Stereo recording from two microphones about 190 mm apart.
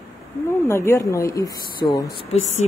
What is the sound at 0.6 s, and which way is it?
Speech, 15° left (ahead or behind).